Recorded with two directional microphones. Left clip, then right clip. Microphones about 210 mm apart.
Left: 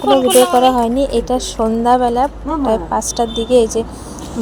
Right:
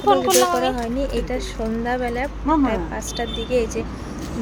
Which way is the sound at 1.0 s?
30° left (ahead or behind).